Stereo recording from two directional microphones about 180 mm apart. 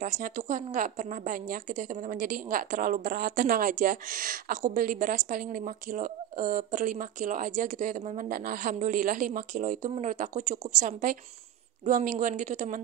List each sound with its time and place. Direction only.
0.0 s a woman's voice: 45° right (ahead or behind)